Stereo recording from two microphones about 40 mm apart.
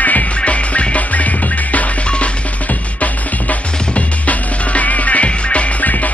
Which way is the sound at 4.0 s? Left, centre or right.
Left.